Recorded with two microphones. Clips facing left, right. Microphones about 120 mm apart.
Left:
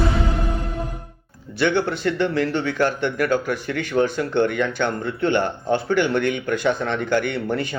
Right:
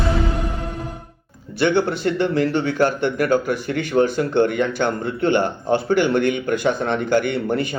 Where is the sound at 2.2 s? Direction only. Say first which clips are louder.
Right 3 dB; 40° right (ahead or behind).